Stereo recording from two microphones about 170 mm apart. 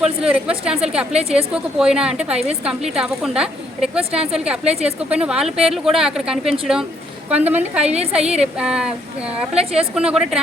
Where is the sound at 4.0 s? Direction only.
35° right (ahead or behind).